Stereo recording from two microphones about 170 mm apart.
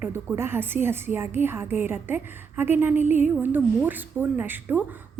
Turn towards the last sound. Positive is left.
turn(degrees=-10)  # may be behind; listen again after turning